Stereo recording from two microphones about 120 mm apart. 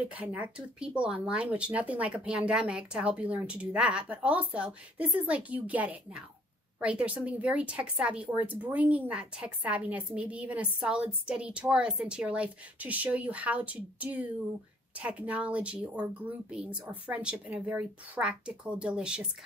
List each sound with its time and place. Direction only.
0.0 s speech: 10° right (ahead or behind)